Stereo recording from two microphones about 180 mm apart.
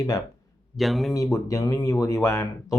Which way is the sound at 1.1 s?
20° left (ahead or behind).